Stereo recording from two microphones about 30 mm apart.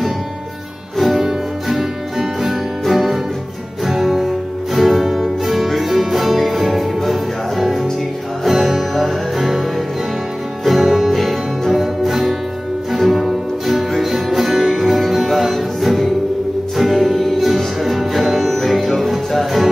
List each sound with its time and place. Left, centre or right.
0.9 s music: centre
10.6 s music: centre
14.8 s music: centre